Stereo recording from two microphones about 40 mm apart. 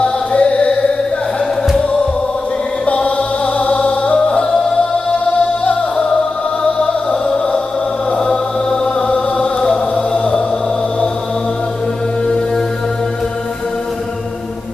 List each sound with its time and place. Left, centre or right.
0.0 s music: left
2.9 s music: left